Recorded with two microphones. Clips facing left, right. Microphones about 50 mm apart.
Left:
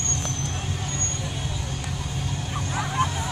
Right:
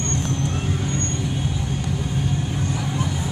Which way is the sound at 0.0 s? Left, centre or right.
Centre.